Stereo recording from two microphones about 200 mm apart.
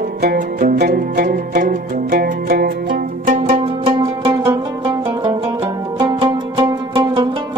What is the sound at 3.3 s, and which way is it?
Zither, 30° right (ahead or behind).